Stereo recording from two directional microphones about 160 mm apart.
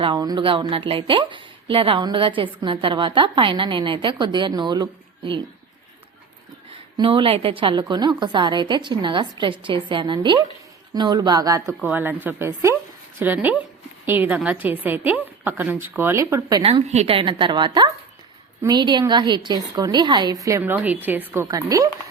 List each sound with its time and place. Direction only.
0.0 s speech: 25° right (ahead or behind)
6.9 s a woman's voice: 30° right (ahead or behind)
16.6 s a woman's voice: 40° right (ahead or behind); by 21.8 s 20° right (ahead or behind)